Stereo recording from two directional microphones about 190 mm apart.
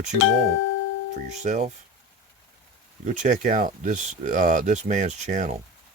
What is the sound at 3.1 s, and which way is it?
Speech, 40° right (ahead or behind).